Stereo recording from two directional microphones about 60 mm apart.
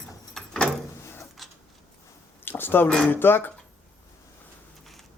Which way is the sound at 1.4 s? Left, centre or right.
Centre.